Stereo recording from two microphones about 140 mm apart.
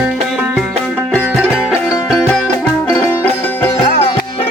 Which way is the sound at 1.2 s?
5° right (ahead or behind).